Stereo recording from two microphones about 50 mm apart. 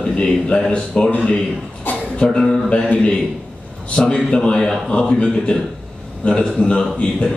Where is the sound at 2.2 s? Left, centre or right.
Centre.